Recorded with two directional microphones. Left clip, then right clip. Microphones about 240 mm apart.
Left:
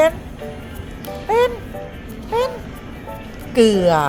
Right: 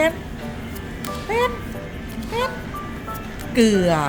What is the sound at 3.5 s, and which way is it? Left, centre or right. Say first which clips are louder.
Speech: left 4 dB; centre.